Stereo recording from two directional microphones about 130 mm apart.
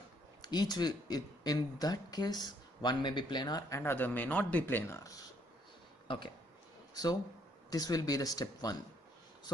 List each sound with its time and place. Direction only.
0.4 s speech: 30° left (ahead or behind)
3.8 s a man's voice: 15° left (ahead or behind)
6.0 s speech: 40° left (ahead or behind)
6.9 s a sound: 30° left (ahead or behind)
7.7 s speech: 30° left (ahead or behind)